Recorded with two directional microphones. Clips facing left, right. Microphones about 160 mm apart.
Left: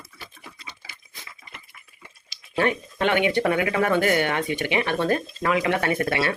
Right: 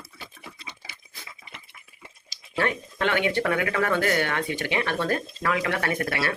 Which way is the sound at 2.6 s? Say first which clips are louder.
Left 3 dB; 20° left (ahead or behind).